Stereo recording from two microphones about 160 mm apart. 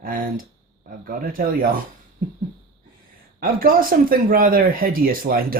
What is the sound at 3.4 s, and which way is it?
Speech, 65° right (ahead or behind).